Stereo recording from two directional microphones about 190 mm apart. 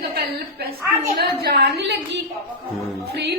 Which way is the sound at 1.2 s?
60° right (ahead or behind).